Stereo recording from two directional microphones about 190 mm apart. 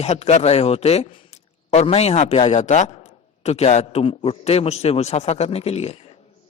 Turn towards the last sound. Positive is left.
turn(degrees=35)  # may be behind; listen again after turning